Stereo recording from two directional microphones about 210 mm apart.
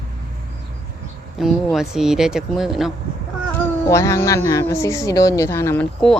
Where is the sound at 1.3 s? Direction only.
Centre (ahead or behind).